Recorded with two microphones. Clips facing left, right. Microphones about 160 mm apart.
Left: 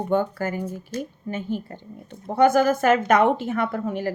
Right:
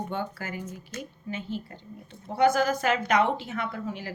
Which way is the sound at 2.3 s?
55° left (ahead or behind).